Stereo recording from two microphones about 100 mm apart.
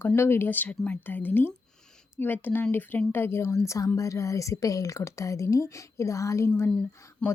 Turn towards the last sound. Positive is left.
turn(degrees=10)  # may be behind; listen again after turning